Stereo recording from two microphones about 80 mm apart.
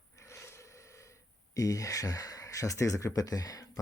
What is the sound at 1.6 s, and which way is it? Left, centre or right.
Speech, left.